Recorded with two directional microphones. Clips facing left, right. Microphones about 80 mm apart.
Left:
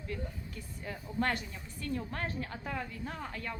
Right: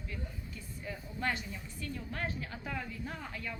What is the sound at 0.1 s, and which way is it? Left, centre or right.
A woman's voice, left.